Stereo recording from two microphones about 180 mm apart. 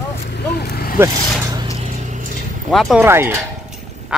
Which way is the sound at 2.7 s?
Centre (ahead or behind).